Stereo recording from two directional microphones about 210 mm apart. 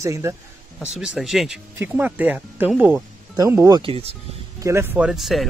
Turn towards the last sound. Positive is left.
turn(degrees=0)  # may be behind; listen again after turning